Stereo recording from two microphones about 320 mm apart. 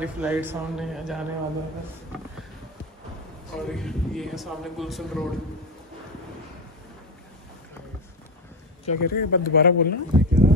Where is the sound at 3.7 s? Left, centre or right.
Centre.